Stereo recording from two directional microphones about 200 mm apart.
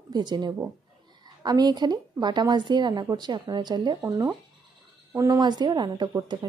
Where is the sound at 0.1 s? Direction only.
20° right (ahead or behind).